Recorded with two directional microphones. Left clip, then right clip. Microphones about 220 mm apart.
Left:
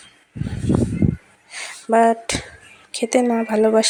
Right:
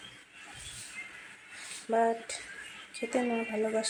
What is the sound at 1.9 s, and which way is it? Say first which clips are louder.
Speech: left 13 dB; 45° left (ahead or behind).